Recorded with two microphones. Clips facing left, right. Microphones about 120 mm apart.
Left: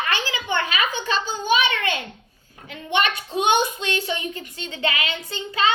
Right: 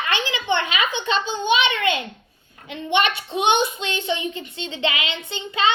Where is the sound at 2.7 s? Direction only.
25° right (ahead or behind).